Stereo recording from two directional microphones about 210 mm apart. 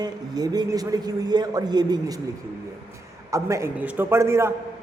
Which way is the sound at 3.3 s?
15° right (ahead or behind).